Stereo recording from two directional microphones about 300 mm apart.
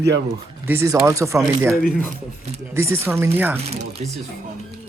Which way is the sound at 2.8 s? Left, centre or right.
Centre.